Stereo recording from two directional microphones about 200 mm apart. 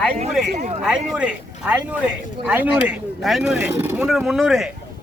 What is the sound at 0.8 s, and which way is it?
Speech, 5° right (ahead or behind).